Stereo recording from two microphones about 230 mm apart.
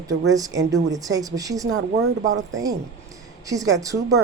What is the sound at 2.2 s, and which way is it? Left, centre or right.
Speech, right.